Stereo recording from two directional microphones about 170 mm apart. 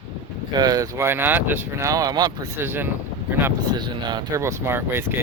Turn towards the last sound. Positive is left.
turn(degrees=-15)  # may be behind; listen again after turning